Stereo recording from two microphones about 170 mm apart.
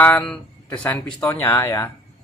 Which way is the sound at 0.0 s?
5° left (ahead or behind).